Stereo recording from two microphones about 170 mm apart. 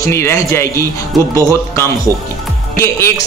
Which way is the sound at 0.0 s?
15° left (ahead or behind).